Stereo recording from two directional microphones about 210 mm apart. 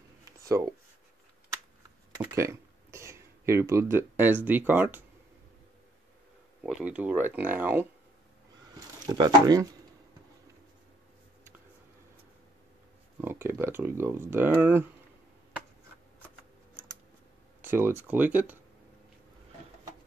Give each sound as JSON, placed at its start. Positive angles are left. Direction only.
{"t": 0.4, "sound": "a sound", "side_deg": -15}
{"t": 2.1, "sound": "speech", "side_deg": -15}
{"t": 6.6, "sound": "speech", "side_deg": -5}
{"t": 9.0, "sound": "speech", "side_deg": -20}
{"t": 13.2, "sound": "speech", "side_deg": -10}
{"t": 17.6, "sound": "speech", "side_deg": -10}